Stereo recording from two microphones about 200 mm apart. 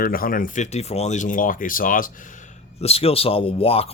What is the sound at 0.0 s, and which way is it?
Speech, 45° left (ahead or behind).